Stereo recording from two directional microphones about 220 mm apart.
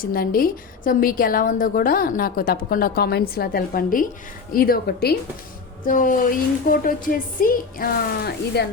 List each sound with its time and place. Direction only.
0.0 s a woman's voice: 40° left (ahead or behind)